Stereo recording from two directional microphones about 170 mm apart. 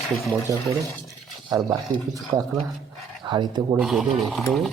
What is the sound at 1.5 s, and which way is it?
Speech, 20° right (ahead or behind).